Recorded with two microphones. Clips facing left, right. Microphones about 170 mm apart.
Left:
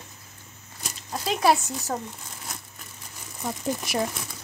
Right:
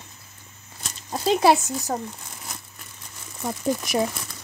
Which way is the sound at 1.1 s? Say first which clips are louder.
Right 4 dB; 25° right (ahead or behind).